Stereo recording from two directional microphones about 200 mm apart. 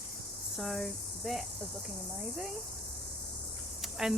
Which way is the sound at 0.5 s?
Centre (ahead or behind).